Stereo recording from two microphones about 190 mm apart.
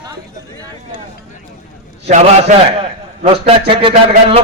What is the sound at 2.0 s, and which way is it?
A man's voice, 35° right (ahead or behind).